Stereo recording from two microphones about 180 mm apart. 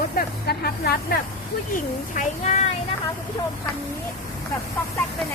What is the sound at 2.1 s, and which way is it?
Speech, 40° left (ahead or behind).